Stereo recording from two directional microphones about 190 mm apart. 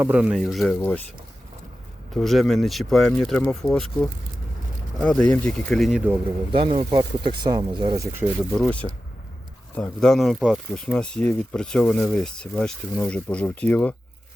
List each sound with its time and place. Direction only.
0.0 s speech: 5° right (ahead or behind); by 1.0 s 10° left (ahead or behind)
2.1 s speech: centre (ahead or behind)
6.5 s speech: 25° right (ahead or behind)
8.5 s speech: 5° left (ahead or behind)